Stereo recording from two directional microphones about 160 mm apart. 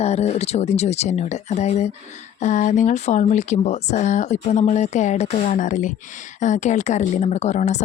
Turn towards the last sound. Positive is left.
turn(degrees=45)  # may be behind; listen again after turning